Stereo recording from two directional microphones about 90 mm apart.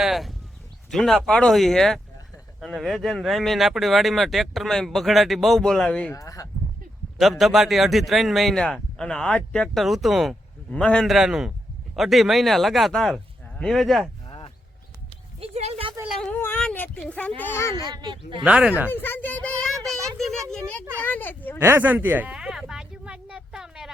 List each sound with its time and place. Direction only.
0.0 s a sound: centre (ahead or behind)
0.9 s speech: 5° left (ahead or behind)
6.1 s speech: 40° left (ahead or behind)
7.2 s speech: centre (ahead or behind)
9.8 s speech: centre (ahead or behind)
10.7 s a man's voice: 10° left (ahead or behind)
11.0 s speech: 5° right (ahead or behind)
14.3 s a sound: 65° left (ahead or behind)
15.4 s a sound: 90° right
16.6 s speech: 15° left (ahead or behind)
17.7 s speech: 50° right (ahead or behind)
18.4 s speech: 10° right (ahead or behind)
18.9 s a child's voice: 25° left (ahead or behind)
21.8 s a sound: 20° right (ahead or behind)